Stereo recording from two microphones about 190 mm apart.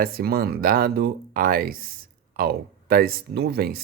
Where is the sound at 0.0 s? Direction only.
55° right (ahead or behind).